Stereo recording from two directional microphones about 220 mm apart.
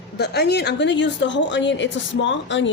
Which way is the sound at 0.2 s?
50° left (ahead or behind).